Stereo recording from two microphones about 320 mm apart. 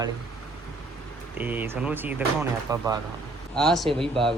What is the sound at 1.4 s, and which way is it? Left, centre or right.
Speech, centre.